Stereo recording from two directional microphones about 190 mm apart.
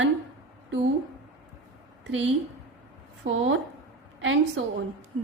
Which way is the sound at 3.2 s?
90° right.